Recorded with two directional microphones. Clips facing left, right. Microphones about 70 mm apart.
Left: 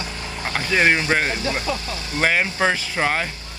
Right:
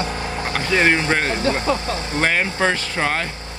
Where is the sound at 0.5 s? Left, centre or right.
Centre.